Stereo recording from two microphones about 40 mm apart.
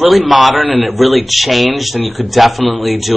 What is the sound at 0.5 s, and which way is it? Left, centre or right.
Speech, right.